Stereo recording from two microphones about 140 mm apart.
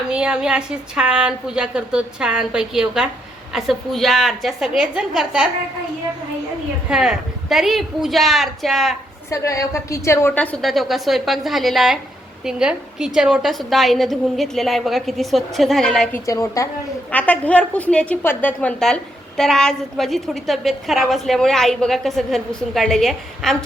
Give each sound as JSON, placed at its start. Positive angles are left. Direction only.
{"t": 0.1, "sound": "a woman's voice", "side_deg": -5}
{"t": 6.8, "sound": "a woman's voice", "side_deg": -5}
{"t": 9.3, "sound": "a woman's voice", "side_deg": 20}
{"t": 16.1, "sound": "a woman's voice", "side_deg": 25}
{"t": 17.1, "sound": "a woman's voice", "side_deg": 10}